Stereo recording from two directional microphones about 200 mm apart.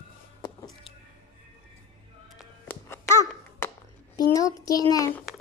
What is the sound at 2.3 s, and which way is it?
Music, 10° left (ahead or behind).